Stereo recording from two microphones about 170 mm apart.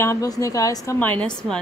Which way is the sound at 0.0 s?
20° left (ahead or behind).